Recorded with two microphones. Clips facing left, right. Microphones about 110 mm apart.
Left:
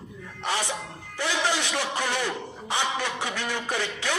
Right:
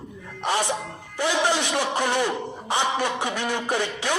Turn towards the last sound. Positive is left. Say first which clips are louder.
# right 4 dB
turn(degrees=-20)  # may be behind; listen again after turning